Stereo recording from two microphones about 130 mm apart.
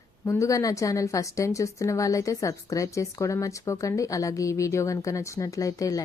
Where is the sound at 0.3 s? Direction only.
25° left (ahead or behind).